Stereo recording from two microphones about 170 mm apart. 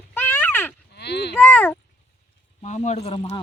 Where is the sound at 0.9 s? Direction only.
75° left (ahead or behind).